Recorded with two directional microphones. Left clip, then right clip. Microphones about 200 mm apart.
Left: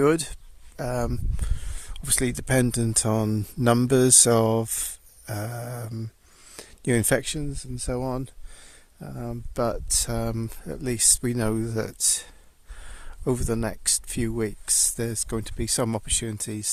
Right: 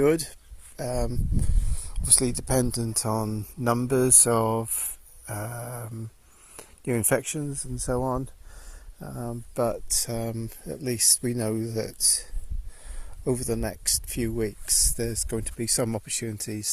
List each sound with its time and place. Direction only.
0.0 s speech: 20° left (ahead or behind)
3.0 s speech: 30° left (ahead or behind)
6.6 s a sound: 30° left (ahead or behind)
7.0 s speech: 40° left (ahead or behind)
7.9 s speech: 25° left (ahead or behind)